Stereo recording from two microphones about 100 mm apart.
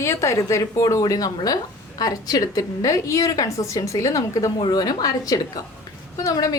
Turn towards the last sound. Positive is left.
turn(degrees=35)  # may be behind; listen again after turning